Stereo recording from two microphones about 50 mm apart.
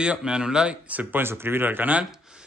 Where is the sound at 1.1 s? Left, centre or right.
Right.